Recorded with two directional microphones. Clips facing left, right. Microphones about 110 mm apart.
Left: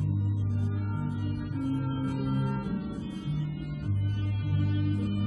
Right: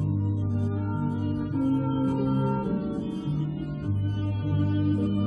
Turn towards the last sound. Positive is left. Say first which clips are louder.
# right 6 dB
turn(degrees=-30)  # may be behind; listen again after turning